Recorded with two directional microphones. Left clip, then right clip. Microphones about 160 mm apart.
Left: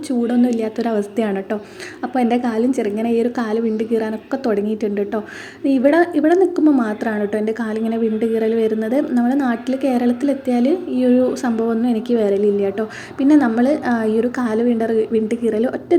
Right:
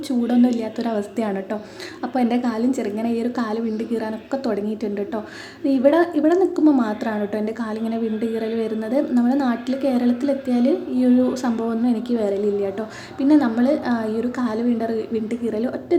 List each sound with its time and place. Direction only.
0.3 s a woman's voice: 10° left (ahead or behind)